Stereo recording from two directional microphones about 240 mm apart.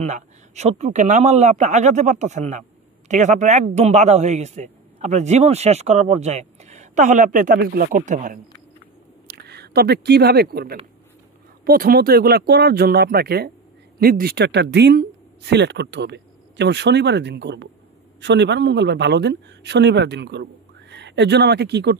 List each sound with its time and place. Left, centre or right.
0.0 s a man's voice: right
9.3 s speech: right